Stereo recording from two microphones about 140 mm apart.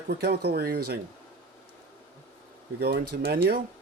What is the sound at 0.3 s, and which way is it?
Speech, 90° right.